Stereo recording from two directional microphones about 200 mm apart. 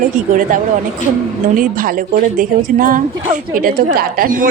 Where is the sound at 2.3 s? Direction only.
45° right (ahead or behind).